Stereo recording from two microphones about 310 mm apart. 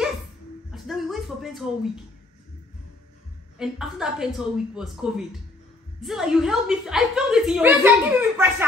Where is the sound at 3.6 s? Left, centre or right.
Centre.